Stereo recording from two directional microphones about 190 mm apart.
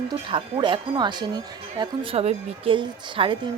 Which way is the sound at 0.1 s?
25° right (ahead or behind).